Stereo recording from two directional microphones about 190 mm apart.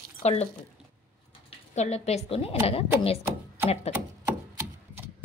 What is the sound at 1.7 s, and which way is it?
Speech, 35° left (ahead or behind).